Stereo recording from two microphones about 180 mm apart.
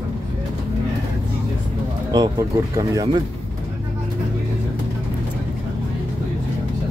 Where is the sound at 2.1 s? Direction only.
20° right (ahead or behind).